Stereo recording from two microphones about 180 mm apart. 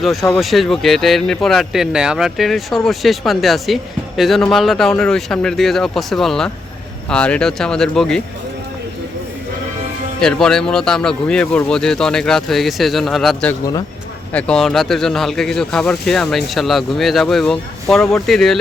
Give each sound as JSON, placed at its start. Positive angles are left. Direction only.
{"t": 0.0, "sound": "speech", "side_deg": 0}
{"t": 10.2, "sound": "speech", "side_deg": 5}
{"t": 13.5, "sound": "speech", "side_deg": 20}
{"t": 14.3, "sound": "speech", "side_deg": 5}